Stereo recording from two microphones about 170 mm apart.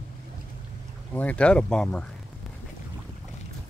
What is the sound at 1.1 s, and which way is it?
Speech, 10° left (ahead or behind).